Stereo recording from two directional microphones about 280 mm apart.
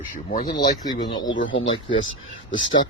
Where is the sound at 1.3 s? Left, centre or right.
Left.